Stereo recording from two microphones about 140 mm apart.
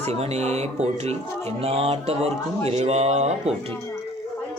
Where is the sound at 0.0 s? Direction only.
50° right (ahead or behind).